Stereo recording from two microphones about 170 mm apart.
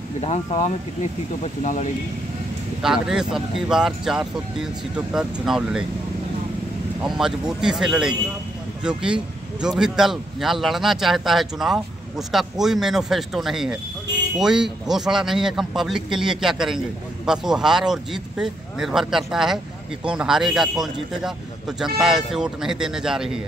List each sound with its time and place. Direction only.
0.2 s speech: 40° left (ahead or behind)
2.8 s speech: 5° right (ahead or behind)
7.0 s speech: 5° right (ahead or behind)